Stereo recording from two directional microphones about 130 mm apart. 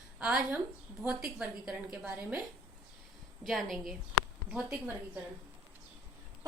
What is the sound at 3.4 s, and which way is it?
A woman's voice, centre (ahead or behind).